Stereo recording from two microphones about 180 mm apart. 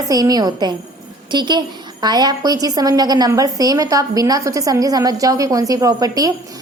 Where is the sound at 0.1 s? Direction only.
20° right (ahead or behind).